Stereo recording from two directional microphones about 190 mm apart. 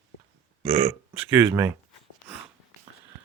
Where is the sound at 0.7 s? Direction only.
30° right (ahead or behind).